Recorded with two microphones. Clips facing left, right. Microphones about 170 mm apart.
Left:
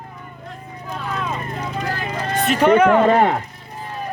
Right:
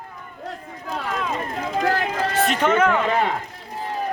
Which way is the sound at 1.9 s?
90° right.